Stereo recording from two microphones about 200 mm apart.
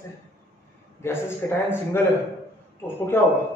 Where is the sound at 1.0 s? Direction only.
15° left (ahead or behind).